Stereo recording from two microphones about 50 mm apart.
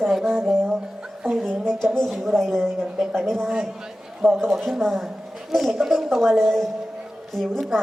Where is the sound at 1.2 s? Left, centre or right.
Centre.